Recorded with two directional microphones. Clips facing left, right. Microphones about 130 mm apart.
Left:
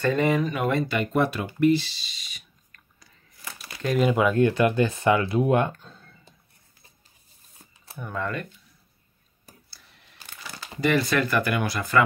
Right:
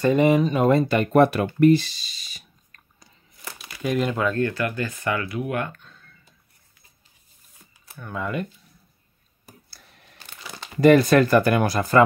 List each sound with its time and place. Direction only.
0.0 s speech: 20° right (ahead or behind)
0.6 s speech: 35° right (ahead or behind)
3.8 s speech: centre (ahead or behind); by 6.3 s 30° left (ahead or behind)
8.1 s speech: 10° right (ahead or behind)
10.8 s speech: 45° right (ahead or behind)